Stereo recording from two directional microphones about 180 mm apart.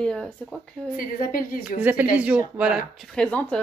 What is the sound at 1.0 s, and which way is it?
Speech, 50° left (ahead or behind).